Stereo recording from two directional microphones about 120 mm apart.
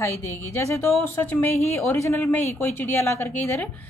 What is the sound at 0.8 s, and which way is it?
Speech, 20° left (ahead or behind).